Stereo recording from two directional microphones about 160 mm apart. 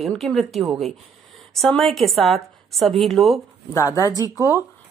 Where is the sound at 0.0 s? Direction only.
Centre (ahead or behind).